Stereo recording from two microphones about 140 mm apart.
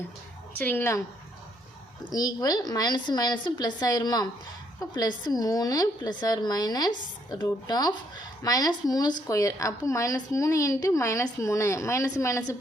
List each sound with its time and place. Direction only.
0.6 s a woman's voice: 15° left (ahead or behind)
2.1 s a woman's voice: 25° left (ahead or behind)